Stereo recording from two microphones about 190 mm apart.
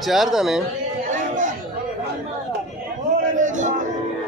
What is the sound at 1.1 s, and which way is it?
Chatter, 40° right (ahead or behind).